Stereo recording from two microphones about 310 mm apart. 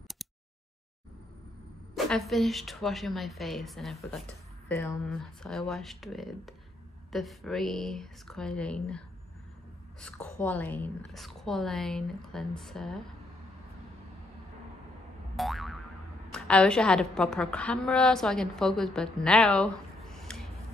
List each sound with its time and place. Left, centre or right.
2.0 s a woman's voice: centre
15.3 s boing: centre
16.3 s a woman's voice: centre